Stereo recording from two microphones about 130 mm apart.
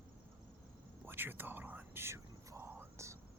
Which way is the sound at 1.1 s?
15° right (ahead or behind).